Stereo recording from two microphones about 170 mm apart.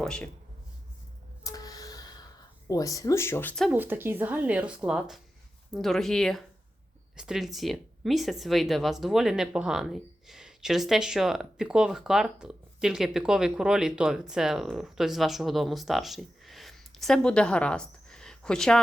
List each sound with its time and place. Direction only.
0.0 s speech: 5° left (ahead or behind)
1.5 s a sound: 20° left (ahead or behind)
2.6 s speech: 20° left (ahead or behind)
3.5 s speech: centre (ahead or behind)
3.8 s speech: 10° right (ahead or behind); by 18.8 s 5° left (ahead or behind)